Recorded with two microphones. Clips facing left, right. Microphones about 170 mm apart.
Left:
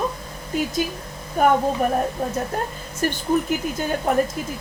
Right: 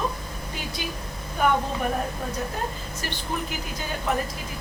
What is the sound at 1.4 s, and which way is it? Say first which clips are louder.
Speech: left 5 dB; 45° left (ahead or behind).